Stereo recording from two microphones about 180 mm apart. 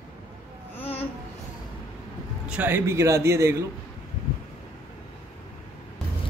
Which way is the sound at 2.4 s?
10° right (ahead or behind).